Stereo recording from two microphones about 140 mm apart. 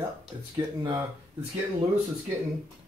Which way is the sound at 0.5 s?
35° right (ahead or behind).